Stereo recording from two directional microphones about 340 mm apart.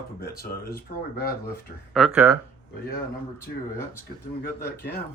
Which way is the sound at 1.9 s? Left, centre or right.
Centre.